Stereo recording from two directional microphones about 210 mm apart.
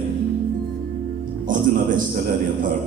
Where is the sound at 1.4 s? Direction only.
40° right (ahead or behind).